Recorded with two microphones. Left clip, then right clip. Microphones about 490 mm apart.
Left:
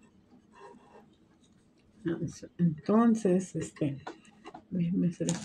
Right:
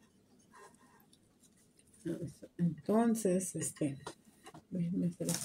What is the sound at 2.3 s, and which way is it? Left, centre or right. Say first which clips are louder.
Speech: left 6 dB; right.